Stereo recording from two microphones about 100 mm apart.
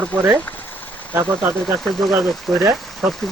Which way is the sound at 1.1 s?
20° right (ahead or behind).